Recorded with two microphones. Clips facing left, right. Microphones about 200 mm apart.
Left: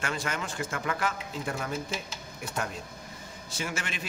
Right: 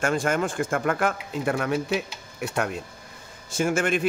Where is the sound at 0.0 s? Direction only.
50° right (ahead or behind); by 2.7 s 70° right (ahead or behind).